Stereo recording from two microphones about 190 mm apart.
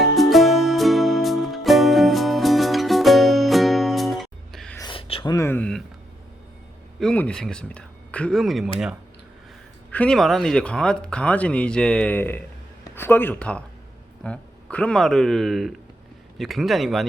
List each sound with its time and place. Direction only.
0.0 s music: centre (ahead or behind)
4.8 s a sound: 25° left (ahead or behind); by 5.8 s 5° left (ahead or behind)
7.0 s speech: 5° left (ahead or behind)
9.9 s speech: 5° left (ahead or behind)